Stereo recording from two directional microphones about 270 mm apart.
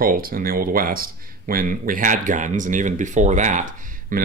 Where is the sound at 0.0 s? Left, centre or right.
Right.